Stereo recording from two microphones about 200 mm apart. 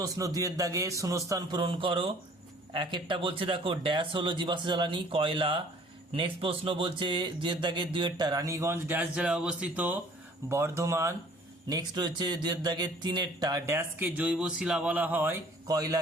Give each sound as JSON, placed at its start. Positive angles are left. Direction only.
{"t": 0.0, "sound": "speech", "side_deg": -15}